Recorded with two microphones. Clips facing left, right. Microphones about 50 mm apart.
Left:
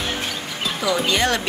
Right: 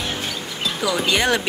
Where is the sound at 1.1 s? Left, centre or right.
Centre.